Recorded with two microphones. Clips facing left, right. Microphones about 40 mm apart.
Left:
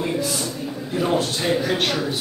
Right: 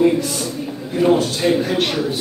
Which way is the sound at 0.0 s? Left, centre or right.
Centre.